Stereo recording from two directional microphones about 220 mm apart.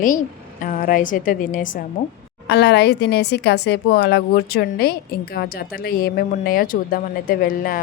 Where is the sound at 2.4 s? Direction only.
50° left (ahead or behind).